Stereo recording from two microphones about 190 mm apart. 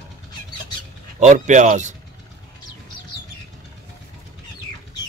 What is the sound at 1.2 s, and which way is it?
Speech, 40° right (ahead or behind).